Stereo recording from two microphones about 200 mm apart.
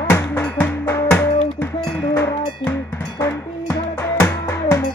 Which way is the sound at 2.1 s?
10° left (ahead or behind).